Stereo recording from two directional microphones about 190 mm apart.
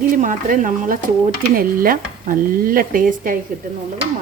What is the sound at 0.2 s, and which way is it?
Stir, 45° right (ahead or behind).